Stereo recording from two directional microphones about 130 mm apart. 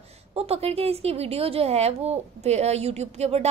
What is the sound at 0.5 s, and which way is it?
A woman's voice, 50° right (ahead or behind).